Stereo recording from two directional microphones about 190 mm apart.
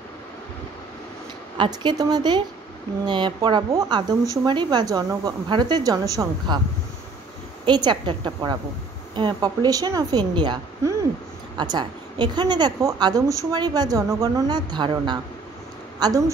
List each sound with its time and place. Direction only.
1.6 s a woman's voice: 25° right (ahead or behind)
7.6 s a woman's voice: 25° right (ahead or behind)